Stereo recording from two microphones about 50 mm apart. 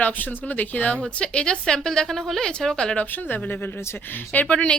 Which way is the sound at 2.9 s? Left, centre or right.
Left.